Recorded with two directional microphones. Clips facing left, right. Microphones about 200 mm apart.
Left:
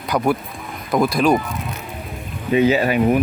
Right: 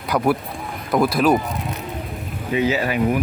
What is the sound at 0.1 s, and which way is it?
Speech, 5° left (ahead or behind).